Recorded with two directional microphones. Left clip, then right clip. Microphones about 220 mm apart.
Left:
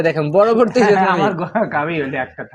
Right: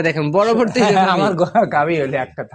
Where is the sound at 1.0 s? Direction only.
55° right (ahead or behind).